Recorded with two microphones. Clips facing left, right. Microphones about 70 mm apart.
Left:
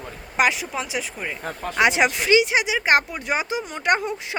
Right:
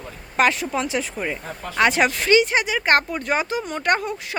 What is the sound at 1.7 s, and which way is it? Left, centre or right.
Speech, centre.